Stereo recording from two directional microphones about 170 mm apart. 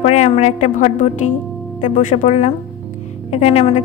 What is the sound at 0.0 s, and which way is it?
A woman's voice, 40° left (ahead or behind).